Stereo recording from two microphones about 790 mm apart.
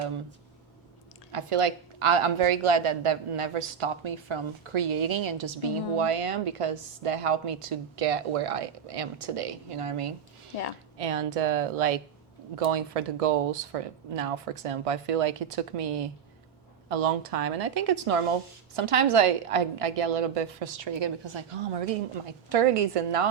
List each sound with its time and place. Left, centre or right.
1.3 s a woman's voice: right